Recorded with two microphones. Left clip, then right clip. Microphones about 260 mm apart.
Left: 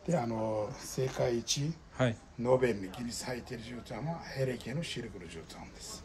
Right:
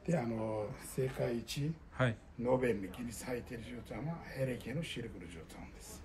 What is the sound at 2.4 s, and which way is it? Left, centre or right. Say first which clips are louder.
A man's voice: left 4 dB; left.